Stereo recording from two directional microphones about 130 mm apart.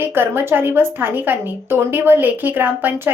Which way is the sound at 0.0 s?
15° right (ahead or behind).